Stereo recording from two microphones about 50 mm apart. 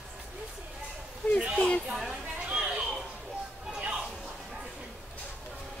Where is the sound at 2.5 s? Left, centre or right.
Centre.